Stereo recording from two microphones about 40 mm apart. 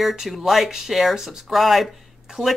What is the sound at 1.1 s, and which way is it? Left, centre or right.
Speech, centre.